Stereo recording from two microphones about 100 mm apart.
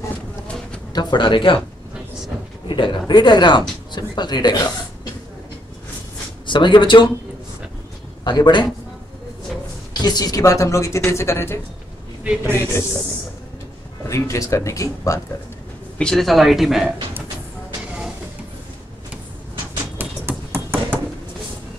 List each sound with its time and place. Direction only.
0.9 s speech: 50° left (ahead or behind)
2.7 s speech: 50° left (ahead or behind)
6.4 s speech: 55° left (ahead or behind)
8.2 s a man's voice: 45° left (ahead or behind)
9.9 s a woman's voice: 45° left (ahead or behind); by 11.6 s 25° left (ahead or behind)
12.2 s a man's voice: 15° right (ahead or behind)
14.0 s a woman's voice: 30° left (ahead or behind)
16.0 s speech: 5° left (ahead or behind)
20.0 s a sound: 20° right (ahead or behind)